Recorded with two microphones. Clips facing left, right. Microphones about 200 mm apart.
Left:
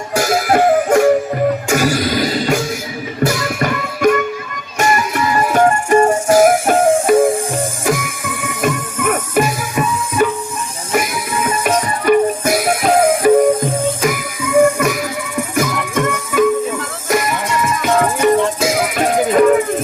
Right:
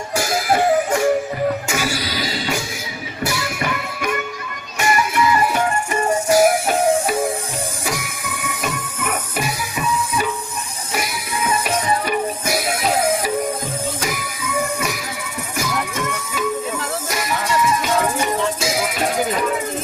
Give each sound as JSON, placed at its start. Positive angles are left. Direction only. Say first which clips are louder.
{"t": 0.2, "sound": "music", "louder": "left 5 dB", "side_deg": 55}